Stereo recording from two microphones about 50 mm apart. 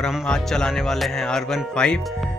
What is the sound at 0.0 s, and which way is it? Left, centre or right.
Speech, centre.